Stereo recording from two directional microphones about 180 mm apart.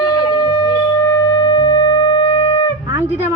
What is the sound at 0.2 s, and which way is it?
Wind instrument, 25° left (ahead or behind).